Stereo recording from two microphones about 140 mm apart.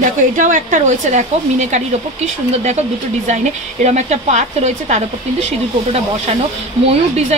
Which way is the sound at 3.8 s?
55° right (ahead or behind).